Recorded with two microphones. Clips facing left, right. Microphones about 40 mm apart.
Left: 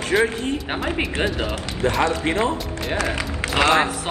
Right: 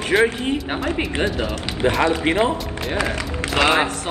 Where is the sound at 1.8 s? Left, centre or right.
Right.